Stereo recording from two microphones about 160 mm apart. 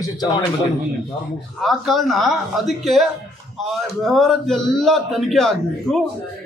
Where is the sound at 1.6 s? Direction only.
Centre (ahead or behind).